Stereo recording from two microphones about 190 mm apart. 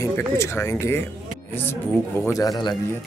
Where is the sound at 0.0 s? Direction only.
15° left (ahead or behind).